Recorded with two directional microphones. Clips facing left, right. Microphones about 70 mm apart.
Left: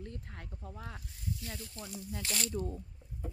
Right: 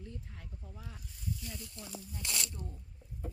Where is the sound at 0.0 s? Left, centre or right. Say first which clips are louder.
Left 3 dB; left.